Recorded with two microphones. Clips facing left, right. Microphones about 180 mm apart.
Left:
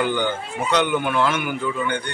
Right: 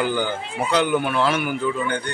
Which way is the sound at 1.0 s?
35° right (ahead or behind).